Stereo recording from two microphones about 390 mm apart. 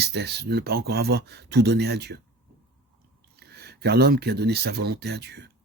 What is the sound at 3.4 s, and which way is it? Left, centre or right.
Speech, right.